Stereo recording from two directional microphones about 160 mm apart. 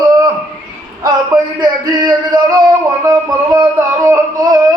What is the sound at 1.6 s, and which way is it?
Singing, 25° right (ahead or behind).